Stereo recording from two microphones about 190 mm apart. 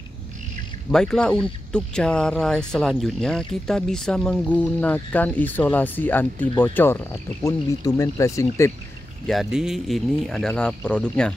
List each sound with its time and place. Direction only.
0.9 s speech: 5° left (ahead or behind)
9.3 s speech: centre (ahead or behind)